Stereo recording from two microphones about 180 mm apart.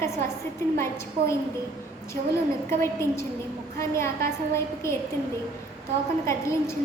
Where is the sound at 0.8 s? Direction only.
15° left (ahead or behind).